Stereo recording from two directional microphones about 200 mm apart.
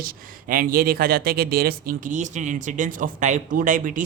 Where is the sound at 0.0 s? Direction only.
45° right (ahead or behind).